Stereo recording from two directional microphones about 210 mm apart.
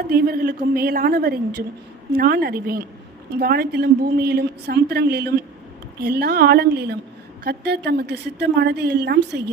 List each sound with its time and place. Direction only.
0.0 s a woman's voice: 45° right (ahead or behind)